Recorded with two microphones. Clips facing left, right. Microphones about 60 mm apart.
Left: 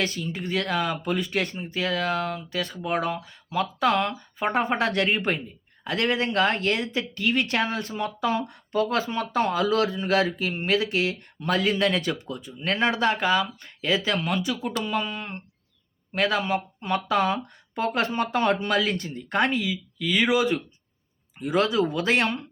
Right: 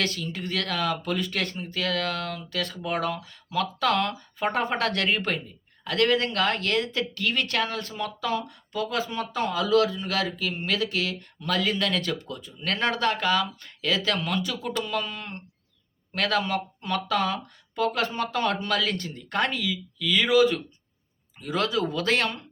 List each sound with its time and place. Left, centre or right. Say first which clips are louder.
0.0 s speech: left 1 dB; centre; by 8.5 s left
8.7 s speech: left 4 dB; left; by 22.4 s centre